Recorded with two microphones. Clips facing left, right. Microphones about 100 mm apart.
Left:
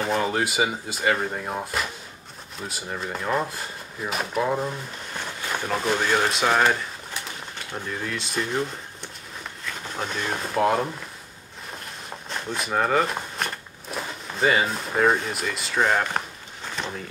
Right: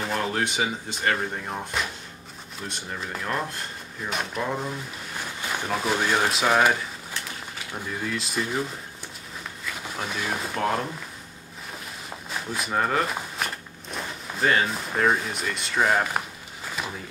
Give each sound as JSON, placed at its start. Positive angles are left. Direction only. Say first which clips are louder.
{"t": 0.0, "sound": "speech", "louder": "left 3 dB", "side_deg": 0}
{"t": 5.7, "sound": "speech", "louder": "left 1 dB", "side_deg": 0}
{"t": 11.8, "sound": "a sound", "louder": "left 1 dB", "side_deg": -5}